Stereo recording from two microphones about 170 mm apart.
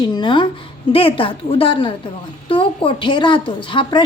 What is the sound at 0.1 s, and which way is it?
A woman's voice, 25° left (ahead or behind).